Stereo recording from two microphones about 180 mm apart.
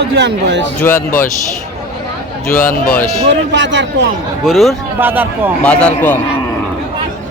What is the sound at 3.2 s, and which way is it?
Speech, 85° right.